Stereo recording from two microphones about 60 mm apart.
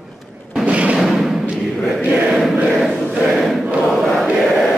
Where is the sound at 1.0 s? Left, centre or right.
Centre.